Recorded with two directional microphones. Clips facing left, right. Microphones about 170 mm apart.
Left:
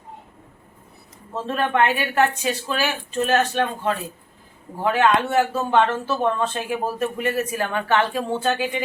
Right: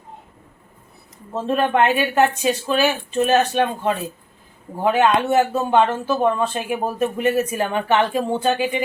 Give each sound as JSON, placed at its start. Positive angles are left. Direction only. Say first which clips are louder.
{"t": 1.5, "sound": "speech", "louder": "right 3 dB", "side_deg": -20}